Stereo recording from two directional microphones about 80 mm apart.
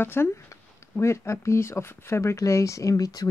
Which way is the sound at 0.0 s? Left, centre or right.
Left.